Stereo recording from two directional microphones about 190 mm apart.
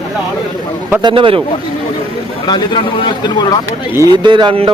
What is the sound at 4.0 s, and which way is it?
Speech, 25° right (ahead or behind).